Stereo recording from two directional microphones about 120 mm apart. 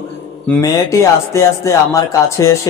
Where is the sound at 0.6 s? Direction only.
25° left (ahead or behind).